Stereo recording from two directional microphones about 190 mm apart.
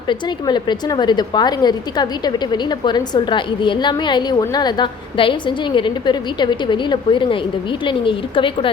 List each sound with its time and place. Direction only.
0.1 s a woman's voice: 25° left (ahead or behind)